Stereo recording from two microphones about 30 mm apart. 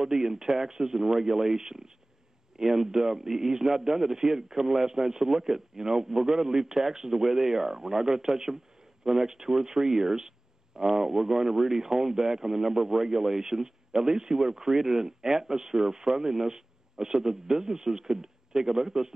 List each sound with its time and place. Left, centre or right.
0.0 s speech: centre